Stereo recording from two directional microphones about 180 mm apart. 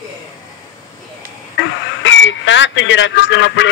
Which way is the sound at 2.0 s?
90° left.